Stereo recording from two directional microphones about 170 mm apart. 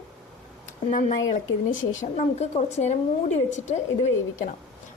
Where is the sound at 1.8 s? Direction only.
50° left (ahead or behind).